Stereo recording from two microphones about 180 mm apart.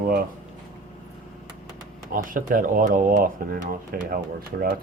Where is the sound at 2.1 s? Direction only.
50° right (ahead or behind).